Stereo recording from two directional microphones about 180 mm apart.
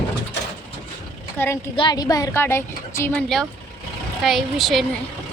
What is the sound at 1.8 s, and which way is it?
A woman's voice, 25° left (ahead or behind).